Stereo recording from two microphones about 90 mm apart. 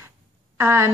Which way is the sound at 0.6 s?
30° right (ahead or behind).